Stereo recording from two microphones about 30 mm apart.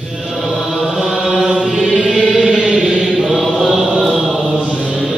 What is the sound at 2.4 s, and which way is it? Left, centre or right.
Chant, right.